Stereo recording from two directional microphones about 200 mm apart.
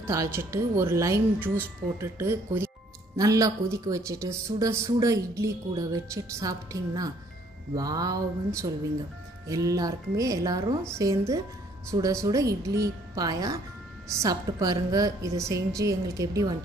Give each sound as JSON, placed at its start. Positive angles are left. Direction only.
{"t": 0.0, "sound": "speech", "side_deg": -15}
{"t": 7.7, "sound": "a sound", "side_deg": -20}
{"t": 9.5, "sound": "speech", "side_deg": -15}